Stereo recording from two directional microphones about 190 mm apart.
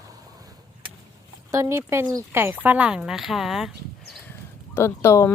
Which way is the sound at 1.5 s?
15° right (ahead or behind).